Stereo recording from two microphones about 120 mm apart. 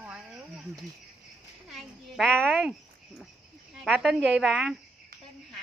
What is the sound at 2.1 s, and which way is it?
Speech, 10° left (ahead or behind).